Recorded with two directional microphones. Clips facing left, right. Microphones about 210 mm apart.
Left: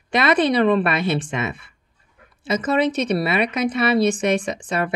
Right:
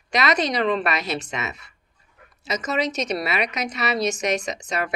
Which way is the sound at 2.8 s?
55° left (ahead or behind).